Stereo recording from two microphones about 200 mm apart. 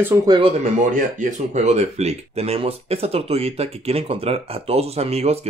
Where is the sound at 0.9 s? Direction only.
40° right (ahead or behind).